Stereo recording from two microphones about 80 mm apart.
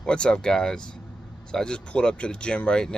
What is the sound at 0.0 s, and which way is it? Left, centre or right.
Speech, centre.